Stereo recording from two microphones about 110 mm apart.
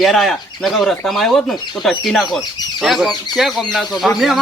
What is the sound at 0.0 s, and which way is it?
Speech, centre (ahead or behind).